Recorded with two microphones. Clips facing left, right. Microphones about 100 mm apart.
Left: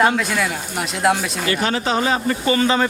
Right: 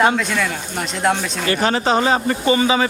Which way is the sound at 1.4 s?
35° right (ahead or behind).